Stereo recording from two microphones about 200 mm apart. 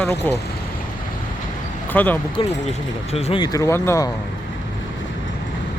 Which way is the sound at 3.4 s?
15° left (ahead or behind).